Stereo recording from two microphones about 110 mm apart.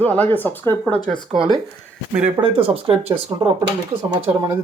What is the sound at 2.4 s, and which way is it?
Speech, 55° right (ahead or behind).